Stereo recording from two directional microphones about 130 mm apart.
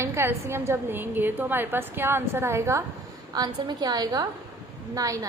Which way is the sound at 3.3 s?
30° right (ahead or behind).